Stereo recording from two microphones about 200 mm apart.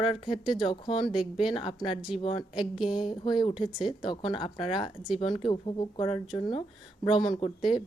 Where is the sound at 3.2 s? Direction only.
25° left (ahead or behind).